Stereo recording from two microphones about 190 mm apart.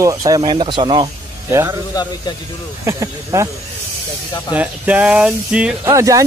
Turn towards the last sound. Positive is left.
turn(degrees=-15)  # may be behind; listen again after turning